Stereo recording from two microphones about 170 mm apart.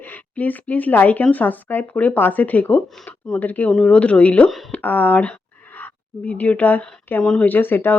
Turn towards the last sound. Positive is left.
turn(degrees=10)  # may be behind; listen again after turning